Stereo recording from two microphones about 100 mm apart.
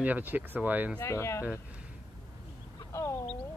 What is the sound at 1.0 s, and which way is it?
Speech, 25° left (ahead or behind).